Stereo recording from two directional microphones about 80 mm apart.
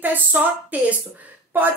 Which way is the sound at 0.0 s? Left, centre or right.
Right.